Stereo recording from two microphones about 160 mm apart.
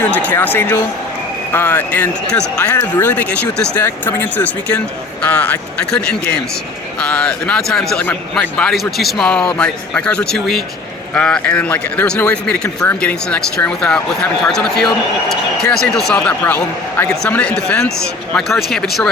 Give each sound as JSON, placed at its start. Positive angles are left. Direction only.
{"t": 0.2, "sound": "a man's voice", "side_deg": 10}